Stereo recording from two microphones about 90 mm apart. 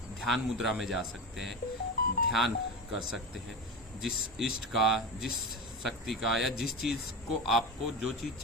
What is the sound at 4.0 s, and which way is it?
Speech, 5° right (ahead or behind).